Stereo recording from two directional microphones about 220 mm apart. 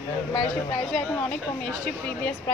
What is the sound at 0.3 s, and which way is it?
Speech, 20° left (ahead or behind).